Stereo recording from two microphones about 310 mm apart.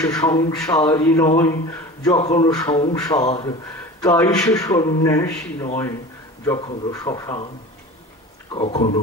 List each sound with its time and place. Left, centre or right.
0.0 s speech: centre
8.5 s speech: left